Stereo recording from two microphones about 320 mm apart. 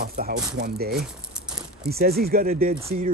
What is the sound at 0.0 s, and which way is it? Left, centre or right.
Speech, right.